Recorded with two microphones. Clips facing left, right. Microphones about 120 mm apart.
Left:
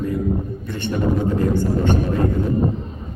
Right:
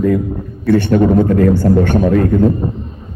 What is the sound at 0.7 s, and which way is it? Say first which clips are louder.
Speech: right 12 dB; 65° right (ahead or behind).